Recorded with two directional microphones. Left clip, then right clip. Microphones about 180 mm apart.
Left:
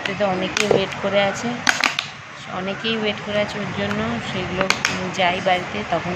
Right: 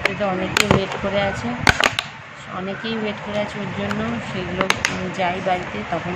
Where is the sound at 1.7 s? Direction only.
50° right (ahead or behind).